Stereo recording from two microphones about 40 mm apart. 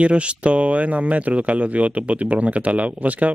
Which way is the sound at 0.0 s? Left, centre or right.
Right.